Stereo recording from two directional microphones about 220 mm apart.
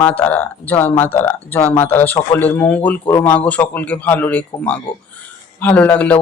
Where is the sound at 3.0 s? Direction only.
15° left (ahead or behind).